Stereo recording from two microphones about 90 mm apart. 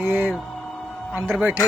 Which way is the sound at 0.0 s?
15° right (ahead or behind).